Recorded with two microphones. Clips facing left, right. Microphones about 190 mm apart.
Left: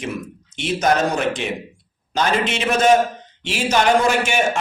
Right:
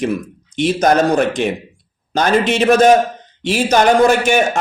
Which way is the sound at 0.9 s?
50° right (ahead or behind).